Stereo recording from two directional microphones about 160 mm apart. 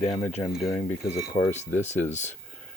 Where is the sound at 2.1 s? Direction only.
45° left (ahead or behind).